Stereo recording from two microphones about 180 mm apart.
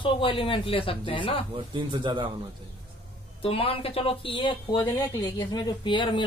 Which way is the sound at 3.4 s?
30° left (ahead or behind).